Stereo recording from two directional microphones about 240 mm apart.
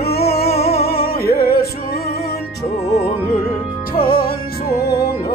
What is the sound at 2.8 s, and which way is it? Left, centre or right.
Music, left.